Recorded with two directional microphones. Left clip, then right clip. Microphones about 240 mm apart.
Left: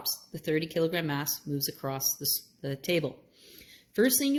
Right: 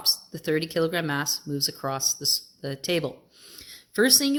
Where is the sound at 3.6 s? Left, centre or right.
Centre.